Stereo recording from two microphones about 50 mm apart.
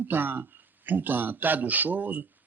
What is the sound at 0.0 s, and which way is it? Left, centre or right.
Speech, right.